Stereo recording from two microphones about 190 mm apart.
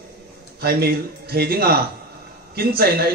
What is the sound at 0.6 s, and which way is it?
A man's voice, 55° right (ahead or behind).